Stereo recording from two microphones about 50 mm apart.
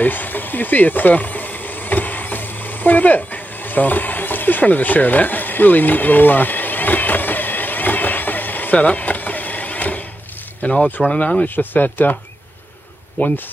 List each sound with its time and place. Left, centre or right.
0.0 s a sound: left
10.7 s speech: centre
11.4 s speech: left